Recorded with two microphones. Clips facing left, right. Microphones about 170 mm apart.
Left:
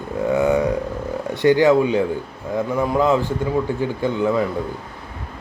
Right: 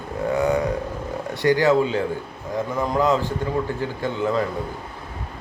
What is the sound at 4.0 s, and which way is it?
Speech, 15° left (ahead or behind).